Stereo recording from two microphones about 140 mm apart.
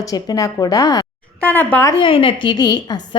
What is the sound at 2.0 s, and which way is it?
A woman's voice, 40° left (ahead or behind).